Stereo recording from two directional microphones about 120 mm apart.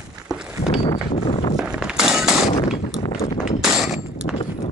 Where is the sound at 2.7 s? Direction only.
55° left (ahead or behind).